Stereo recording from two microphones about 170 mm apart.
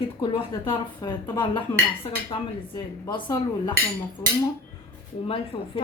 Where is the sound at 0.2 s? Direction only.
30° left (ahead or behind).